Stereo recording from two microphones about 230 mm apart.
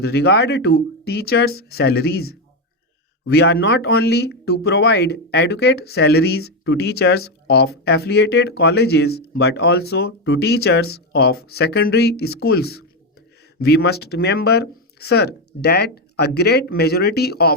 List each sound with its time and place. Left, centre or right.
0.0 s speech: left